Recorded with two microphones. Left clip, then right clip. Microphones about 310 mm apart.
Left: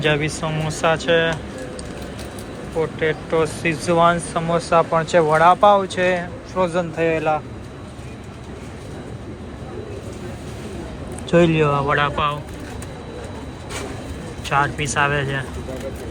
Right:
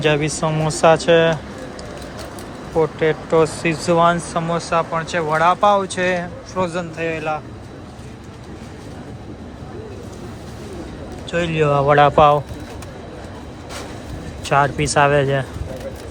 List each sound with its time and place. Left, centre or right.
0.0 s speech: centre
2.7 s speech: centre
11.3 s speech: centre
14.4 s speech: centre